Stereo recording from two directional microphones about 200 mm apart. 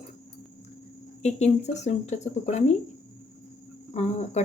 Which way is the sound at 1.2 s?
35° left (ahead or behind).